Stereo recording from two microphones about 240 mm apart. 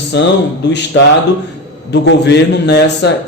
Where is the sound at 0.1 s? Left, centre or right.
Left.